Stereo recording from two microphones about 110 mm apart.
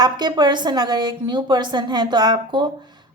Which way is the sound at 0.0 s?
40° right (ahead or behind).